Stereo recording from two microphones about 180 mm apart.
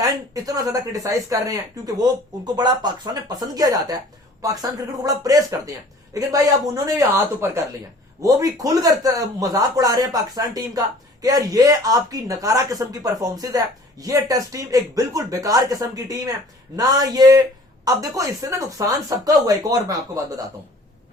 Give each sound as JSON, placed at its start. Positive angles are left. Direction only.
{"t": 0.0, "sound": "speech", "side_deg": -20}